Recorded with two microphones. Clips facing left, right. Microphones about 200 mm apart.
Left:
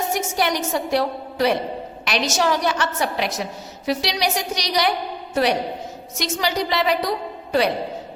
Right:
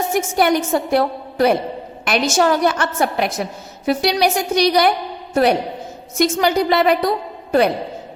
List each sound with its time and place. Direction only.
0.1 s a woman's voice: 55° right (ahead or behind)